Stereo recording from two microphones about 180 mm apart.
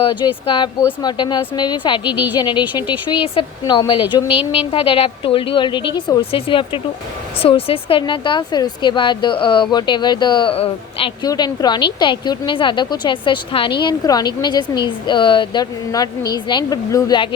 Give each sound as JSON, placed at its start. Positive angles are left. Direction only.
{"t": 0.0, "sound": "a woman's voice", "side_deg": 25}
{"t": 2.0, "sound": "speech", "side_deg": -10}
{"t": 2.3, "sound": "a woman's voice", "side_deg": 25}
{"t": 4.3, "sound": "speech", "side_deg": -5}
{"t": 4.7, "sound": "a woman's voice", "side_deg": 30}